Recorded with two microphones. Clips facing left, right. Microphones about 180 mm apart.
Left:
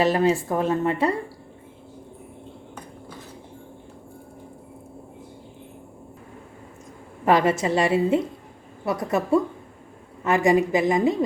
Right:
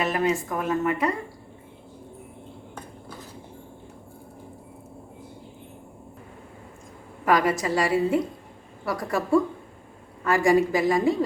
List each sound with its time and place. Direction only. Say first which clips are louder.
0.0 s speech: left 4 dB; 30° left (ahead or behind)
7.3 s a woman's voice: left 3 dB; 25° left (ahead or behind)